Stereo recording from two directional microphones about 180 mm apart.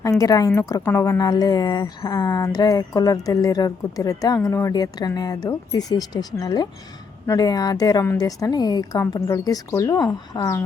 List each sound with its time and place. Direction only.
0.0 s speech: 20° left (ahead or behind)